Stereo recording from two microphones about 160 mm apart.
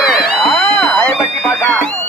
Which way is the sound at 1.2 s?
5° right (ahead or behind).